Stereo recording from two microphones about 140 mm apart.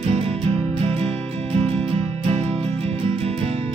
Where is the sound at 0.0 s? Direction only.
45° right (ahead or behind).